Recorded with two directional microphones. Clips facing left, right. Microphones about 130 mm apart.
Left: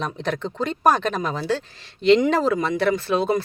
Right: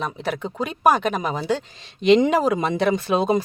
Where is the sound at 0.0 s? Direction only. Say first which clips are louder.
Even; 5° right (ahead or behind).